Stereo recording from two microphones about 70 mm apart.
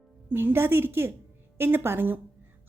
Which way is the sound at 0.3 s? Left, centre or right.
Right.